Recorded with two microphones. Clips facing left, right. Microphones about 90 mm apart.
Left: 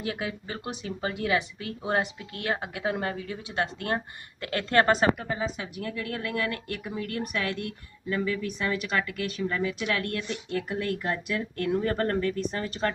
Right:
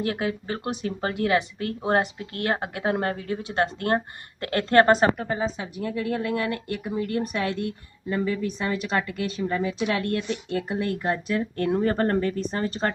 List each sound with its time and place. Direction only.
0.0 s speech: 45° right (ahead or behind); by 12.9 s 30° right (ahead or behind)